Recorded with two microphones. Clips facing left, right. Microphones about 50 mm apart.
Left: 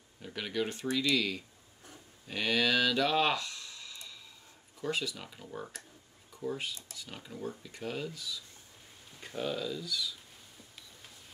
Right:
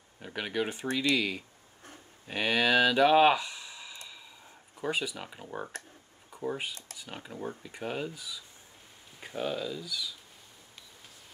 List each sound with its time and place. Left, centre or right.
0.2 s speech: right